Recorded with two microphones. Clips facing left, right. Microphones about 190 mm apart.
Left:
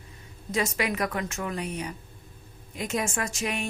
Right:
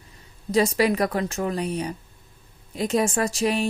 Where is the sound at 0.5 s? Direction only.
35° right (ahead or behind).